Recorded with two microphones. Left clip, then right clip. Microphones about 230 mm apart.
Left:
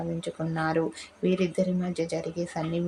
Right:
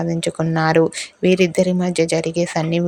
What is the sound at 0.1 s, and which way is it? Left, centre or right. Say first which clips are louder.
Speech: right 11 dB; right.